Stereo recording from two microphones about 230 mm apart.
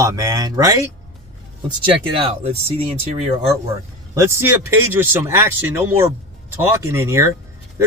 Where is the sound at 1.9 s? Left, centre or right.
Right.